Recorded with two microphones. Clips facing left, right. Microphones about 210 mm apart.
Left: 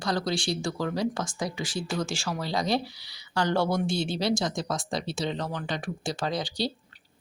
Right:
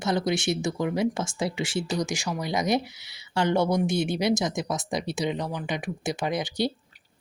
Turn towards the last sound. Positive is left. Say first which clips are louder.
# right 3 dB
turn(degrees=-20)  # may be behind; listen again after turning